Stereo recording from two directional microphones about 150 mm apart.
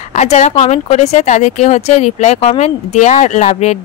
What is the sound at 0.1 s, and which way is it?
Speech, 45° left (ahead or behind).